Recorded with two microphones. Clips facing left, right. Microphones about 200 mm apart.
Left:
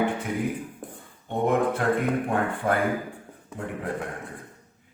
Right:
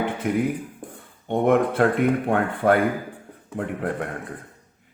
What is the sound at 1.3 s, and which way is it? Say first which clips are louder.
Speech: right 4 dB; 75° right (ahead or behind).